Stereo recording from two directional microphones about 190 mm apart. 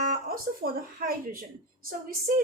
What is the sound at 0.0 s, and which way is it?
A woman's voice, 50° right (ahead or behind).